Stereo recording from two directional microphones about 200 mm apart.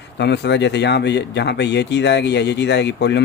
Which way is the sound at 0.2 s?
60° left (ahead or behind).